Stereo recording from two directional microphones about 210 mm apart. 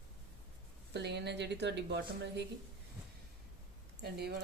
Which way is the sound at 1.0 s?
55° right (ahead or behind).